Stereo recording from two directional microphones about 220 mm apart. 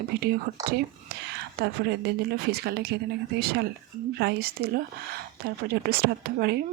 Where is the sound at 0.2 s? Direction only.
45° right (ahead or behind).